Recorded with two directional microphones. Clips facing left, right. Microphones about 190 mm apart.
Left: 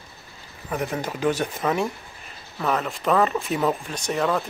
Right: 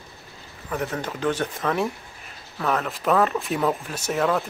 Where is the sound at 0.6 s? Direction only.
10° left (ahead or behind).